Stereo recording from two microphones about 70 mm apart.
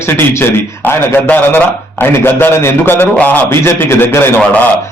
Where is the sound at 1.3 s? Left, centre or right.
Left.